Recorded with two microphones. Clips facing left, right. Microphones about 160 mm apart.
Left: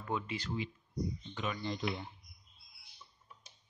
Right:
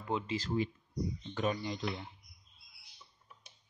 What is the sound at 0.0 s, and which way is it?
Speech, 25° right (ahead or behind).